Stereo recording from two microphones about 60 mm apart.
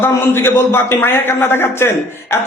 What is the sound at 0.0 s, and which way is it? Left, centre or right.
Speech, left.